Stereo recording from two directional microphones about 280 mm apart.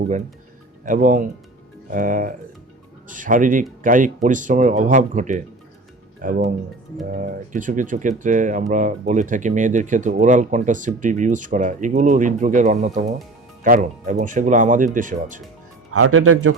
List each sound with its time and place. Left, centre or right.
0.9 s speech: right
15.9 s speech: right